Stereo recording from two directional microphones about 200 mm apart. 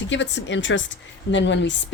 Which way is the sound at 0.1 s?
65° left (ahead or behind).